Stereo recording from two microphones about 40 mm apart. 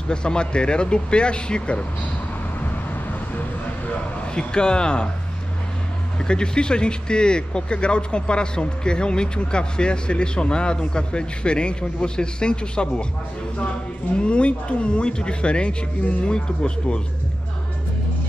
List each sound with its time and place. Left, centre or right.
0.1 s speech: left
4.3 s speech: left
6.1 s speech: left
14.1 s speech: left